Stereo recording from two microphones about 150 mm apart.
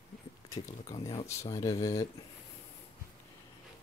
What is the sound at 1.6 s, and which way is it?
Speech, 25° left (ahead or behind).